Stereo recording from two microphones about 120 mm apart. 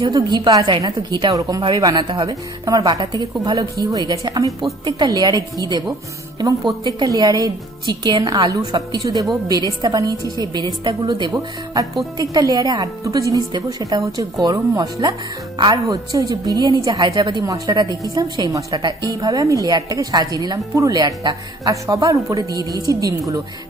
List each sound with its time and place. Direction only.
0.0 s a woman's voice: 40° right (ahead or behind)